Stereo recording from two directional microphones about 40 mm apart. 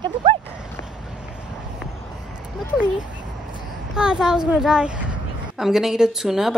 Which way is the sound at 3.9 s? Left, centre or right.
Centre.